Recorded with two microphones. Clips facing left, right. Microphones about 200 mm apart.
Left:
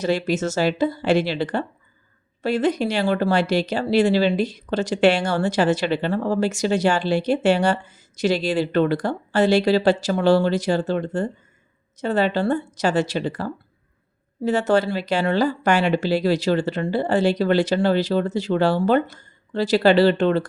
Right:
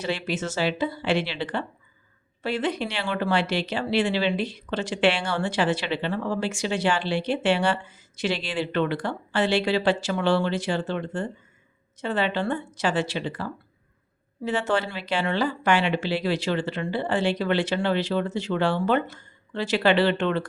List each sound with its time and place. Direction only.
0.0 s speech: 40° left (ahead or behind)